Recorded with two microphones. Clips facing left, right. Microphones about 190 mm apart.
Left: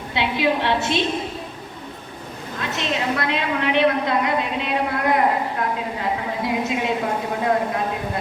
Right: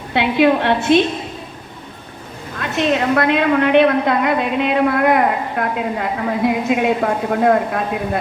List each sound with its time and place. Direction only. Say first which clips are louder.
0.1 s a woman's voice: right 7 dB; 55° right (ahead or behind)
2.6 s a woman's voice: right 8 dB; 55° right (ahead or behind)